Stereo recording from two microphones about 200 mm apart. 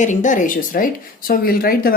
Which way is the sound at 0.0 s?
40° left (ahead or behind).